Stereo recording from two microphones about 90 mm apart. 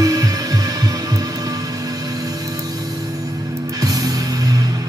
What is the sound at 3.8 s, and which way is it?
Music, 45° right (ahead or behind).